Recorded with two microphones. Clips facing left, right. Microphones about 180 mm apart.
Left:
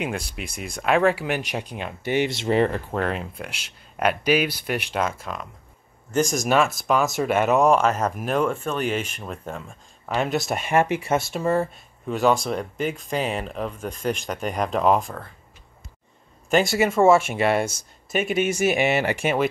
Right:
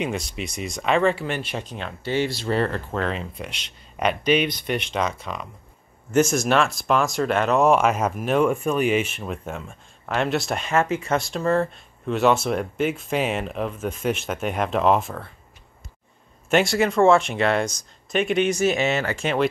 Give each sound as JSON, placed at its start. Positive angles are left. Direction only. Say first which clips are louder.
{"t": 0.2, "sound": "speech", "louder": "right 3 dB", "side_deg": 55}
{"t": 0.8, "sound": "speech", "louder": "left 1 dB", "side_deg": 10}
{"t": 7.6, "sound": "speech", "louder": "even", "side_deg": -10}
{"t": 16.4, "sound": "speech", "louder": "even", "side_deg": 0}